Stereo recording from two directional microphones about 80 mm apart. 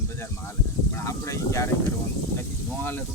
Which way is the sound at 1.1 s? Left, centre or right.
Left.